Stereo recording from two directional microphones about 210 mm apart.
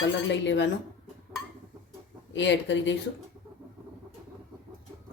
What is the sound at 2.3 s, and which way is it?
Speech, 60° left (ahead or behind).